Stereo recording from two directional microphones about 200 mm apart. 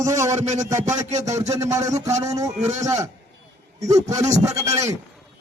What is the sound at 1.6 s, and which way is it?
Speech, 15° right (ahead or behind).